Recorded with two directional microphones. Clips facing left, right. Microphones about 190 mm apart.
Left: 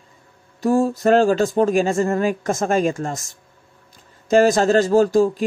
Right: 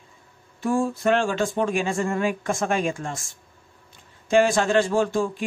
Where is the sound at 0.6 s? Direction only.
40° left (ahead or behind).